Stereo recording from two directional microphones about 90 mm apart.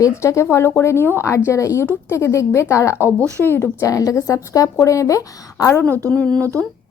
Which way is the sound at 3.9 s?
40° left (ahead or behind).